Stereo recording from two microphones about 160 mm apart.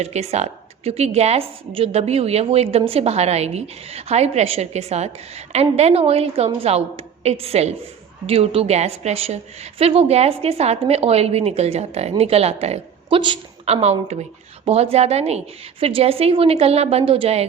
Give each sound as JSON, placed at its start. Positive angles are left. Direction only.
{"t": 0.0, "sound": "a woman's voice", "side_deg": -45}